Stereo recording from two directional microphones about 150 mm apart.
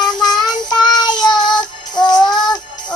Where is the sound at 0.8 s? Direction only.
30° left (ahead or behind).